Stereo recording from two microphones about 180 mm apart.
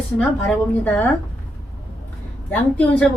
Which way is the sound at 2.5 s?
10° left (ahead or behind).